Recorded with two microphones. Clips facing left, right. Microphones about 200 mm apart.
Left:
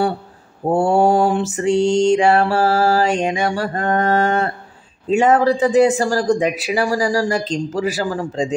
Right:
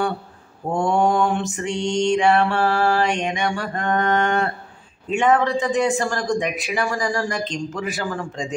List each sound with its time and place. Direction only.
0.7 s mantra: 35° left (ahead or behind)